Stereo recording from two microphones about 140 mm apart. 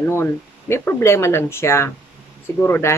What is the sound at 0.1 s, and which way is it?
Speech, 20° left (ahead or behind).